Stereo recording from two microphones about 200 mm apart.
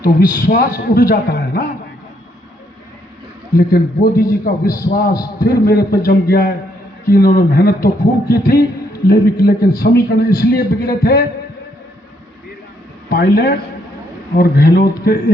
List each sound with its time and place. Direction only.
0.0 s a man's voice: 45° left (ahead or behind)
3.5 s a man's voice: 50° left (ahead or behind)
13.1 s a man's voice: 50° left (ahead or behind)